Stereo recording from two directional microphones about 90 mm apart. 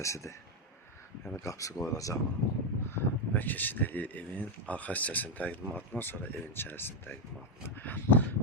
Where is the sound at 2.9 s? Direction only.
20° left (ahead or behind).